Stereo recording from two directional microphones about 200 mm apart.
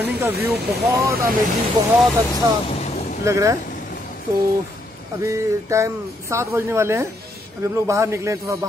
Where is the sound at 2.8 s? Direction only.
35° left (ahead or behind).